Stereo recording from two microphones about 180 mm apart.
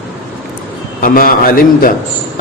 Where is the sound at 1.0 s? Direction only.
55° left (ahead or behind).